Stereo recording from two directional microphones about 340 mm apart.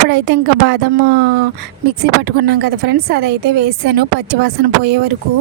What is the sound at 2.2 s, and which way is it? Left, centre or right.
A woman's voice, right.